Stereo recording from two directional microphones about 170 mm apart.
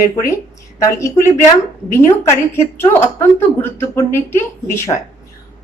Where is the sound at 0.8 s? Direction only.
15° left (ahead or behind).